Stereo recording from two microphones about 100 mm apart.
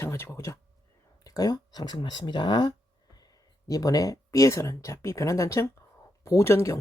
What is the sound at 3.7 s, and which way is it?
A woman's voice, 35° left (ahead or behind).